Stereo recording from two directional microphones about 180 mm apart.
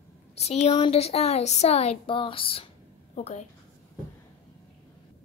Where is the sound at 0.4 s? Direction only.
35° left (ahead or behind).